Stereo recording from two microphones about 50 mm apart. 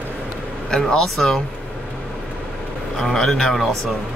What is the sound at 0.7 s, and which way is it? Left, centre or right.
Speech, centre.